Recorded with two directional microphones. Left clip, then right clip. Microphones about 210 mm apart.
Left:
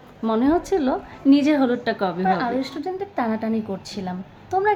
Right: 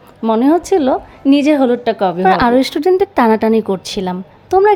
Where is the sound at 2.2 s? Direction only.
50° right (ahead or behind).